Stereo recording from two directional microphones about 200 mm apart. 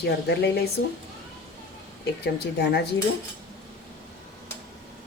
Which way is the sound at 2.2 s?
55° left (ahead or behind).